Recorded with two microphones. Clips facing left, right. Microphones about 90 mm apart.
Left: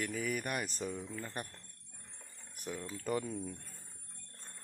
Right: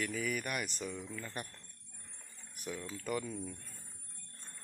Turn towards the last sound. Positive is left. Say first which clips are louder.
# left 2 dB
turn(degrees=10)  # may be behind; listen again after turning